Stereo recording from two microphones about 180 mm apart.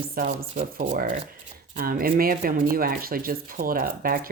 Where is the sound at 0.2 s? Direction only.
50° right (ahead or behind).